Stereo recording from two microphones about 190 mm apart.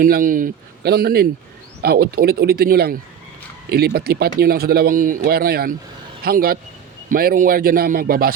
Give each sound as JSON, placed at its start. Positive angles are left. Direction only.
{"t": 0.0, "sound": "speech", "side_deg": -45}